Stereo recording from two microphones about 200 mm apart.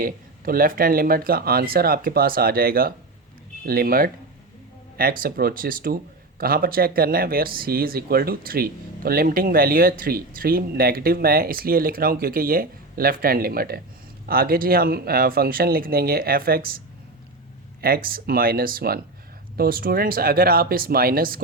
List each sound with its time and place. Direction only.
0.0 s speech: 45° right (ahead or behind)